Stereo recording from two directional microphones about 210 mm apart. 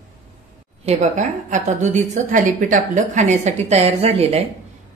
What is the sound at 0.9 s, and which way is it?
A woman's voice, 35° right (ahead or behind).